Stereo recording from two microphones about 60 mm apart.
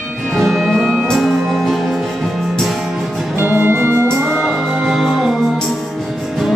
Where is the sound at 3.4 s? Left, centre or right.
Right.